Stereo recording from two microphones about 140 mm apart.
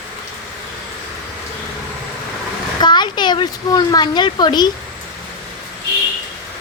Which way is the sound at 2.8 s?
30° left (ahead or behind).